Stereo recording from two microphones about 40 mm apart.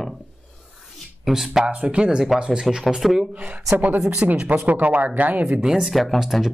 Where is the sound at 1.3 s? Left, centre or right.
Centre.